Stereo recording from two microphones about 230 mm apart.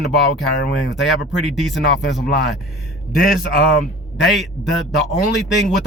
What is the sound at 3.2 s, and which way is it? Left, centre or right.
Speech, left.